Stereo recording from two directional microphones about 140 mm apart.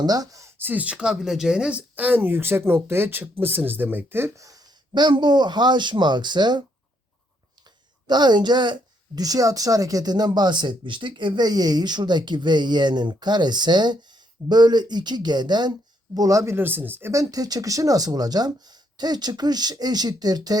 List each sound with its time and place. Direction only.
0.0 s speech: 25° right (ahead or behind)
8.0 s a woman's voice: 30° right (ahead or behind)